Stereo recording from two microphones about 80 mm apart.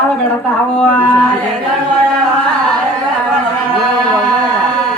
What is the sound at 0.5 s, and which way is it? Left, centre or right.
Speech, left.